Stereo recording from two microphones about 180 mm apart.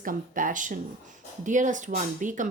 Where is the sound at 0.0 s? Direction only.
50° right (ahead or behind).